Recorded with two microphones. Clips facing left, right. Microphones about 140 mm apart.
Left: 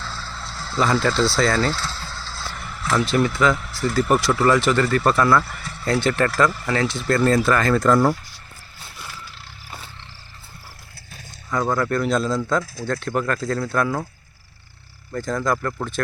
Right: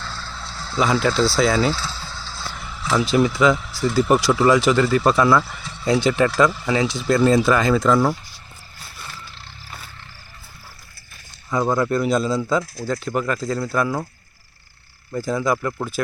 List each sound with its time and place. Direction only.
0.0 s speech: centre (ahead or behind)
9.0 s roaring cats: 5° left (ahead or behind)
11.7 s speech: 10° right (ahead or behind)
15.1 s speech: 5° right (ahead or behind)